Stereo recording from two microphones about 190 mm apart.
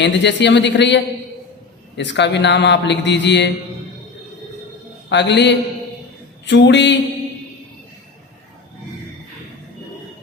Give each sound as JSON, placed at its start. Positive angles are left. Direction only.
{"t": 0.0, "sound": "a man's voice", "side_deg": 65}
{"t": 5.0, "sound": "a man's voice", "side_deg": 65}